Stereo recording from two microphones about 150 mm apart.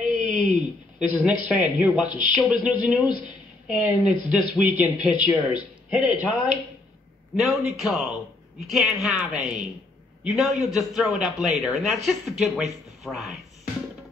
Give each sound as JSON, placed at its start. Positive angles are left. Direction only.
{"t": 0.0, "sound": "a man's voice", "side_deg": -5}
{"t": 7.3, "sound": "speech", "side_deg": 0}